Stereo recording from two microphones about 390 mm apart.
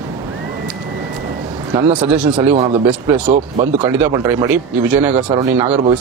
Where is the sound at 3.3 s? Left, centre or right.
Centre.